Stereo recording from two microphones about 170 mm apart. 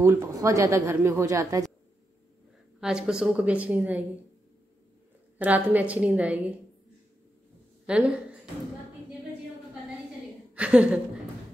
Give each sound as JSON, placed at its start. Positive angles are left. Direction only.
{"t": 0.0, "sound": "a woman's voice", "side_deg": -15}
{"t": 2.8, "sound": "a woman's voice", "side_deg": -5}
{"t": 5.4, "sound": "a woman's voice", "side_deg": -10}
{"t": 7.9, "sound": "a woman's voice", "side_deg": -5}
{"t": 10.5, "sound": "a woman's voice", "side_deg": -5}